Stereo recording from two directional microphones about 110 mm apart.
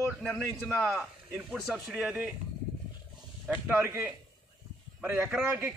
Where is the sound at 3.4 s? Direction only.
15° right (ahead or behind).